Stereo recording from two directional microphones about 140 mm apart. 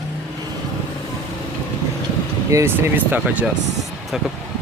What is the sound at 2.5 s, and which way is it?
Speech, 20° right (ahead or behind).